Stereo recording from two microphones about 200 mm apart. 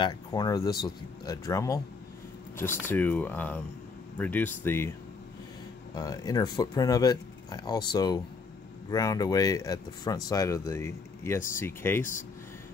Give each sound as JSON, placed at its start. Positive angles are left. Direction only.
{"t": 0.0, "sound": "speech", "side_deg": 20}
{"t": 5.9, "sound": "speech", "side_deg": 20}